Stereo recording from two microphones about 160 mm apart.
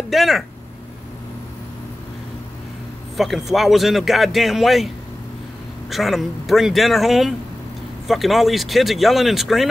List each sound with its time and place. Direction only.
0.1 s speech: centre (ahead or behind)
3.2 s speech: centre (ahead or behind)